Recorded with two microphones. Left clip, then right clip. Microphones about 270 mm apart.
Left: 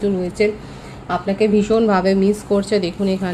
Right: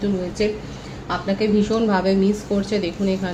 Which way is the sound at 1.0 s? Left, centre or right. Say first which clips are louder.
Left 4 dB; left.